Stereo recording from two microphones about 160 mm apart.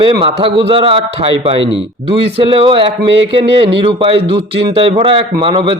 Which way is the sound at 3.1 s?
90° right.